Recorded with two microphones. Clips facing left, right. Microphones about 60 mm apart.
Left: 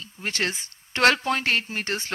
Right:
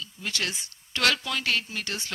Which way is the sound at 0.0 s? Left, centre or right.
Left.